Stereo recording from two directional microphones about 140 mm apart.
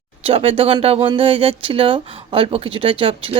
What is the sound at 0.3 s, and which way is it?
A woman's voice, 40° right (ahead or behind).